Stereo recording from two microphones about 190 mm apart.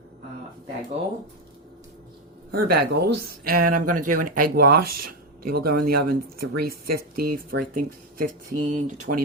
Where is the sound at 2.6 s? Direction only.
55° right (ahead or behind).